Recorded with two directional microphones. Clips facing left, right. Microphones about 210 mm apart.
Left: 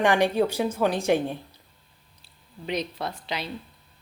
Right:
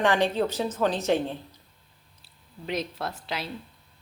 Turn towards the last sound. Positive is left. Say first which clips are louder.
# left 1 dB
turn(degrees=-5)  # may be behind; listen again after turning